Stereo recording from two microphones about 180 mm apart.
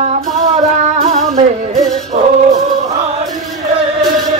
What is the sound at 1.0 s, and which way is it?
Music, 40° right (ahead or behind).